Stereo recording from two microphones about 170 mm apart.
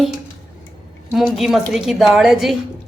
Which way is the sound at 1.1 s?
Centre (ahead or behind).